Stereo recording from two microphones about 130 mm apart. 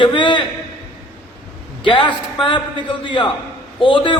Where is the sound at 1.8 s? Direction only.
40° left (ahead or behind).